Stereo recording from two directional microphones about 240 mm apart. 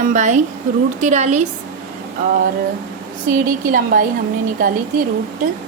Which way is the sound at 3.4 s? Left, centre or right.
Right.